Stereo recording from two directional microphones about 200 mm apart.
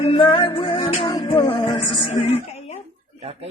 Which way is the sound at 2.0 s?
30° left (ahead or behind).